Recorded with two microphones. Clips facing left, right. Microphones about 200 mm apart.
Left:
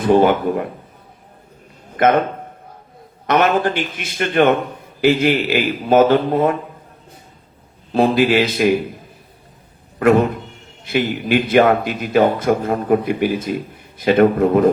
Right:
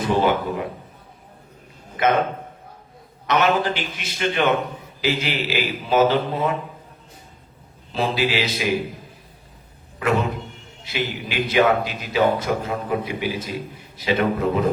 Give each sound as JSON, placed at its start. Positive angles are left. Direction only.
{"t": 0.0, "sound": "a man's voice", "side_deg": 50}
{"t": 2.0, "sound": "a man's voice", "side_deg": 55}
{"t": 3.2, "sound": "a man's voice", "side_deg": 50}
{"t": 7.9, "sound": "a man's voice", "side_deg": 50}
{"t": 10.0, "sound": "a man's voice", "side_deg": 50}